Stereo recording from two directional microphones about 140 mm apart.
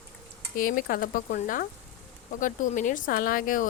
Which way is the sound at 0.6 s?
85° left.